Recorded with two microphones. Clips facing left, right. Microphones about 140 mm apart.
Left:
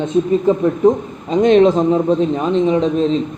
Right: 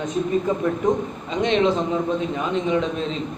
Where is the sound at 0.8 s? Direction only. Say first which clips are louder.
Left 8 dB; 40° left (ahead or behind).